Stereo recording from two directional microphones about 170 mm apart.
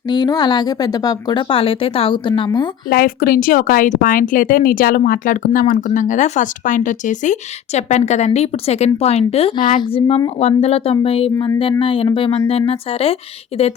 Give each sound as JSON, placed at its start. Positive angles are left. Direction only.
{"t": 0.1, "sound": "speech", "side_deg": 25}
{"t": 2.9, "sound": "a woman's voice", "side_deg": 60}